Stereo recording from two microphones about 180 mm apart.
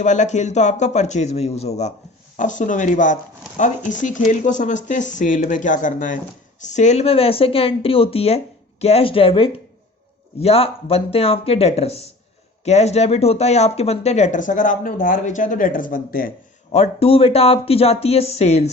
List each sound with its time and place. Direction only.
0.0 s speech: 40° left (ahead or behind)
16.7 s speech: 35° left (ahead or behind)